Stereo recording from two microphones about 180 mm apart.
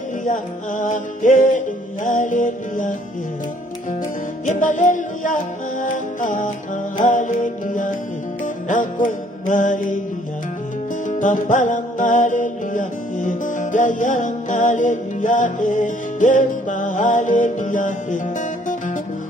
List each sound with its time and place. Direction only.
0.2 s music: 45° left (ahead or behind)
4.5 s music: 45° left (ahead or behind)
11.1 s music: 45° left (ahead or behind)